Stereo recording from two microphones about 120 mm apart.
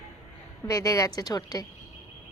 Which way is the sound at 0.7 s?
30° left (ahead or behind).